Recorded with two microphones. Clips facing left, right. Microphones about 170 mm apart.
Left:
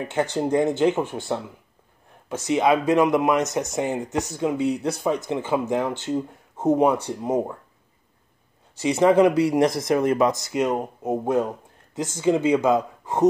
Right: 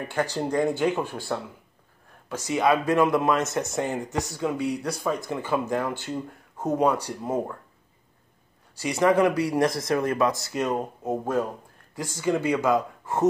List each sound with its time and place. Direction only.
0.1 s speech: 20° left (ahead or behind)
8.7 s speech: 20° left (ahead or behind)